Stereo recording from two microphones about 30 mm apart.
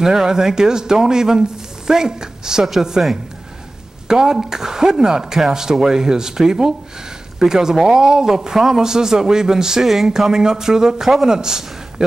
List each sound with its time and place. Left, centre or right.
0.0 s a man's voice: centre
4.1 s a man's voice: centre